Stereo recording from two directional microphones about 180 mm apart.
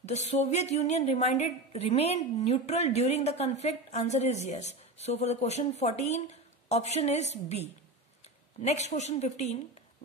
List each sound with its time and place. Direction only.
0.0 s a woman's voice: 40° left (ahead or behind)